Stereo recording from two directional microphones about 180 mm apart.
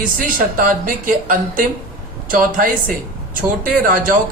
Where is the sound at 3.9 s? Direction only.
50° right (ahead or behind).